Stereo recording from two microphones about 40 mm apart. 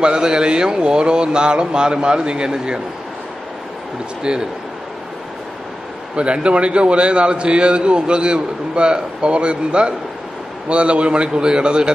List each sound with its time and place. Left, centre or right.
0.0 s a man's voice: right
4.2 s a man's voice: right
6.1 s a man's voice: right